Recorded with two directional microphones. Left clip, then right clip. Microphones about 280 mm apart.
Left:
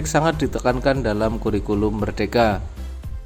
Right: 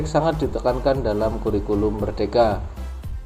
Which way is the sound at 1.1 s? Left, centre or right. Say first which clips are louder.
Even; left.